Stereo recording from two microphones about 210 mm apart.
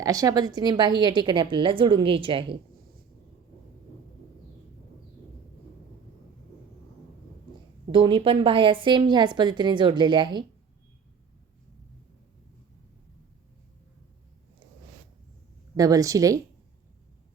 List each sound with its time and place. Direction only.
0.0 s a woman's voice: 15° right (ahead or behind)
7.9 s a woman's voice: 25° right (ahead or behind)
15.7 s a woman's voice: 15° right (ahead or behind)